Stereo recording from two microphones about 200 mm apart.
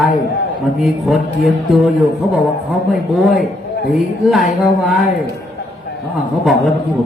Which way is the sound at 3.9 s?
Centre (ahead or behind).